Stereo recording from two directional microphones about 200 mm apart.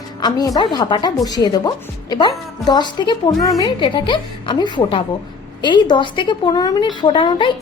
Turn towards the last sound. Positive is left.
turn(degrees=25)  # may be behind; listen again after turning